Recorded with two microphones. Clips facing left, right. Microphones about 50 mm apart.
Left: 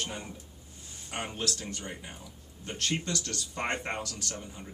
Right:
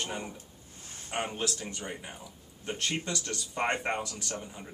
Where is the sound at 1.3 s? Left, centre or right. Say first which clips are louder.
Right 1 dB; centre.